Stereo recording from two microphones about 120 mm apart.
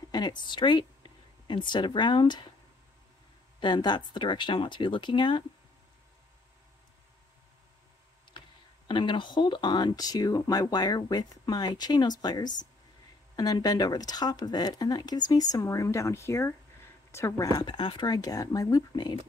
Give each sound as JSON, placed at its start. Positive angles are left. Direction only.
{"t": 0.1, "sound": "a woman's voice", "side_deg": 40}
{"t": 3.5, "sound": "speech", "side_deg": 40}
{"t": 8.8, "sound": "speech", "side_deg": 40}